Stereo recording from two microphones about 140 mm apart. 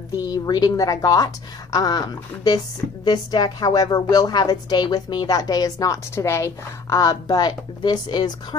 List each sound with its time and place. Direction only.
0.2 s a woman's voice: 25° left (ahead or behind)